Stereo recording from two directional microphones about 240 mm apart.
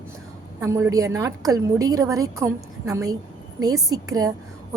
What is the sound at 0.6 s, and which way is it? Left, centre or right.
A woman's voice, centre.